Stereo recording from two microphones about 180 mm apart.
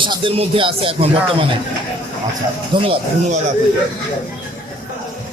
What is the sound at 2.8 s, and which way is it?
Speech, 30° right (ahead or behind).